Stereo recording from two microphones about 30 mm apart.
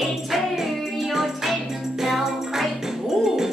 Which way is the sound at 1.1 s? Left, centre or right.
Centre.